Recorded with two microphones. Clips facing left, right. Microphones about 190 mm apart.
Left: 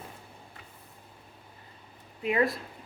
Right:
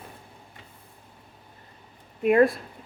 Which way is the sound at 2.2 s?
50° right (ahead or behind).